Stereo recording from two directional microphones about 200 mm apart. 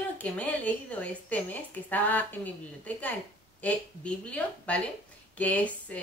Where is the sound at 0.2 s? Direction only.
5° left (ahead or behind).